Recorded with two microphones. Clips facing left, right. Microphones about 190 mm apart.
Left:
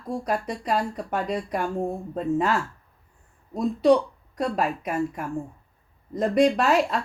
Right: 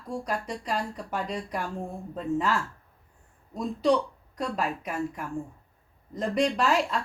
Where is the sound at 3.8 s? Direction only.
55° left (ahead or behind).